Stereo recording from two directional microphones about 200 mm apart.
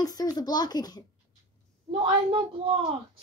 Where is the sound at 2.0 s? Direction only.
25° right (ahead or behind).